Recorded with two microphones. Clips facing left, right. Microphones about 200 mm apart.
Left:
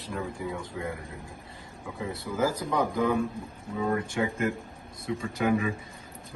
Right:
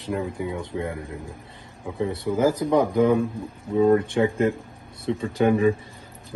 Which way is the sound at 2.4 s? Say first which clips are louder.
Right 7 dB; 25° right (ahead or behind).